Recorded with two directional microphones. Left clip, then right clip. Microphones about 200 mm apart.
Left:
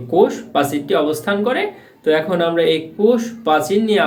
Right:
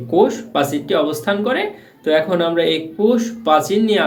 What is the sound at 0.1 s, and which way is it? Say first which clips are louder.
Speech: left 1 dB; centre (ahead or behind).